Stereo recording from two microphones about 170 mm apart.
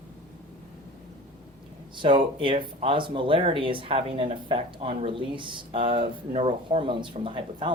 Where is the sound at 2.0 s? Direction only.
30° right (ahead or behind).